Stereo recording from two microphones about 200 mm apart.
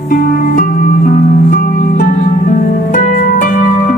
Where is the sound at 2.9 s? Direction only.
40° left (ahead or behind).